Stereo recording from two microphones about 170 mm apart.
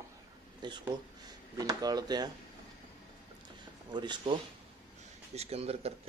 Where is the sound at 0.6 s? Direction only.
25° right (ahead or behind).